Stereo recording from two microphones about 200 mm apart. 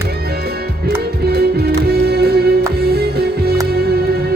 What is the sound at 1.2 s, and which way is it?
Music, 50° right (ahead or behind).